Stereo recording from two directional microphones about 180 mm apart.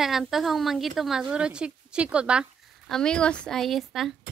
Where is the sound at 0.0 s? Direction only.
Centre (ahead or behind).